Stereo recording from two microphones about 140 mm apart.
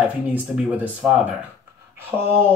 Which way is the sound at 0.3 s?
10° right (ahead or behind).